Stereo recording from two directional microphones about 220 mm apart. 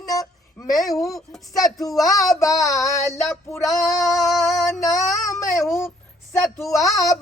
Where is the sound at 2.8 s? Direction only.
Centre (ahead or behind).